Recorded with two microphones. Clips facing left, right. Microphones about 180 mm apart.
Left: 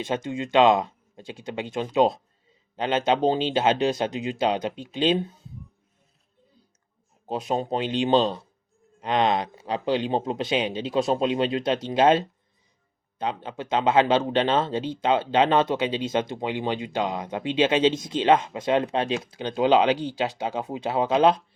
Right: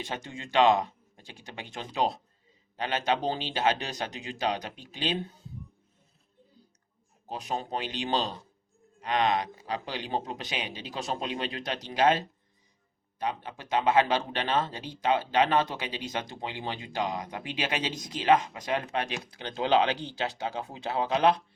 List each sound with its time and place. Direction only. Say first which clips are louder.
0.0 s speech: left 10 dB; 20° left (ahead or behind)
7.3 s speech: left 7 dB; 25° left (ahead or behind)
13.2 s speech: left 4 dB; 25° left (ahead or behind)